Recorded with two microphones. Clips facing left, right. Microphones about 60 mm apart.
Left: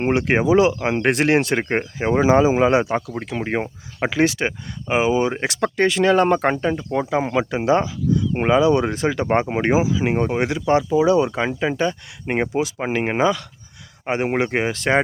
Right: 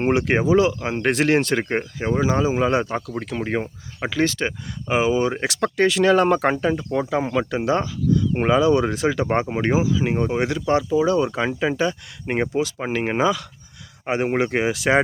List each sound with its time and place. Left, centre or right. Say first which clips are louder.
0.0 s speech: left 1 dB; centre
1.8 s speech: left 3 dB; centre